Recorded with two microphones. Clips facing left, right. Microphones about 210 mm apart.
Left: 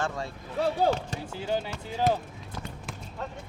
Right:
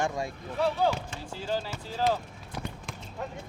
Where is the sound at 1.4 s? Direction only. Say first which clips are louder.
Left 2 dB; 20° left (ahead or behind).